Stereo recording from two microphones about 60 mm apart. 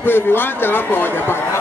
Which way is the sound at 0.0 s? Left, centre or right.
Left.